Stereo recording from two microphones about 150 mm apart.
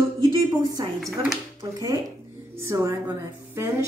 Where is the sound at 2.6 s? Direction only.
20° right (ahead or behind).